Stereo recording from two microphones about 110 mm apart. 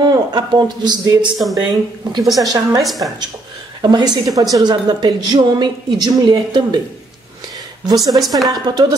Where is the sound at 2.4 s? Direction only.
35° right (ahead or behind).